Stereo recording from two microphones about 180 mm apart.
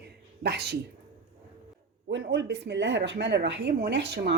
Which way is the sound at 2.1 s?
75° right (ahead or behind).